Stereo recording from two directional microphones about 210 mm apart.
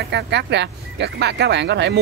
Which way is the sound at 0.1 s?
55° right (ahead or behind).